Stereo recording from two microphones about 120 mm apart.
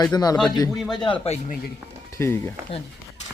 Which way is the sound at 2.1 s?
20° left (ahead or behind).